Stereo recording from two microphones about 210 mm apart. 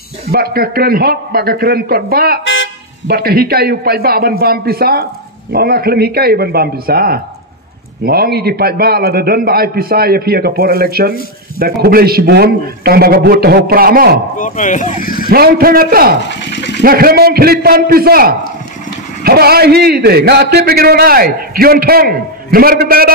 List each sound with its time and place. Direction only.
0.3 s a man's voice: 45° right (ahead or behind)
2.4 s vehicle: 65° left (ahead or behind)
3.1 s a man's voice: 45° right (ahead or behind)
14.4 s speech: 35° left (ahead or behind)
15.2 s a man's voice: 45° right (ahead or behind)
16.3 s a sound: 60° left (ahead or behind)
16.8 s a man's voice: 45° right (ahead or behind)